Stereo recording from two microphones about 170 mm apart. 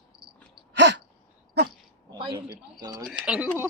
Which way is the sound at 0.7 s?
90° right.